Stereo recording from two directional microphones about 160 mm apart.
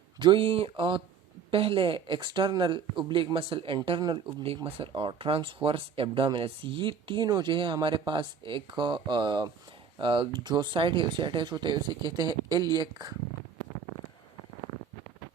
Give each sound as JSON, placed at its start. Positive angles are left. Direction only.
{"t": 0.2, "sound": "speech", "side_deg": -30}